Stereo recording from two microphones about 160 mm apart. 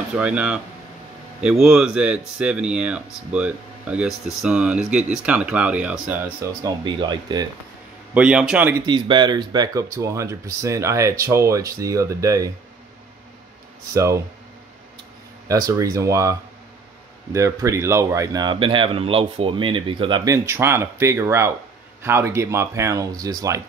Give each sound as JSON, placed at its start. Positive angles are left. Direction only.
{"t": 0.1, "sound": "speech", "side_deg": -10}
{"t": 6.6, "sound": "speech", "side_deg": -30}
{"t": 8.1, "sound": "speech", "side_deg": -10}
{"t": 8.8, "sound": "speech", "side_deg": -30}
{"t": 13.9, "sound": "speech", "side_deg": -20}
{"t": 15.4, "sound": "speech", "side_deg": -20}